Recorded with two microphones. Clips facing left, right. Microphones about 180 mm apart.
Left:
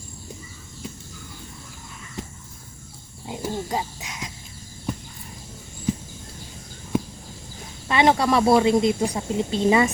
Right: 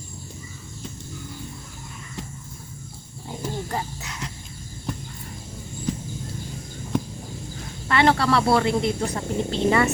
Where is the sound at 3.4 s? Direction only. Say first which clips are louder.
Left 2 dB; 15° left (ahead or behind).